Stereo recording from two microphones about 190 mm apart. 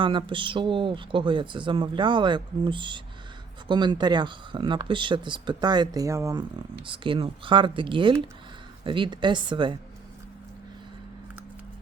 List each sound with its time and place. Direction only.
0.0 s speech: 25° right (ahead or behind)
6.8 s speech: 25° right (ahead or behind)